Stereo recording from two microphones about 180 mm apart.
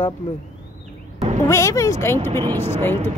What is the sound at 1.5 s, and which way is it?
Speech, 15° left (ahead or behind).